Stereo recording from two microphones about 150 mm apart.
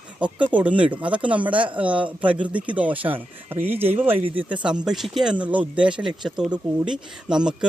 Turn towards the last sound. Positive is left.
turn(degrees=-5)  # may be behind; listen again after turning